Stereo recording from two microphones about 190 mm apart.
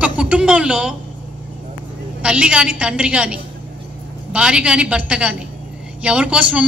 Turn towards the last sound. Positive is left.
turn(degrees=-5)  # may be behind; listen again after turning